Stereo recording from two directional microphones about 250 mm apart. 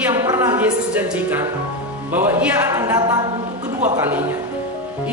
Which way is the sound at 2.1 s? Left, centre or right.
Centre.